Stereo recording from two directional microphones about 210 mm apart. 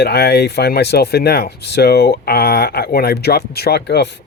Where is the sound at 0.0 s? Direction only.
50° left (ahead or behind).